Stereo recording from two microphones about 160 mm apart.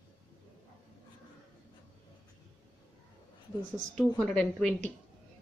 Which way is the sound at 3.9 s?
5° left (ahead or behind).